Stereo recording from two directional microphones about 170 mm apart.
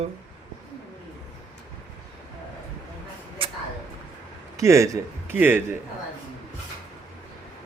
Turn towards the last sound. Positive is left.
turn(degrees=-10)  # may be behind; listen again after turning